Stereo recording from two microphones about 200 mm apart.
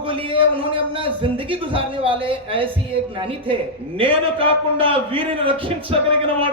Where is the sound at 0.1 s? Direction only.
25° right (ahead or behind).